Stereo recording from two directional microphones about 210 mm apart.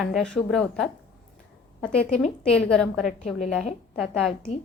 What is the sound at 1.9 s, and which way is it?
Speech, 30° left (ahead or behind).